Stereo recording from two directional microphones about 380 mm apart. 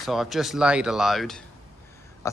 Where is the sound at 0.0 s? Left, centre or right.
Centre.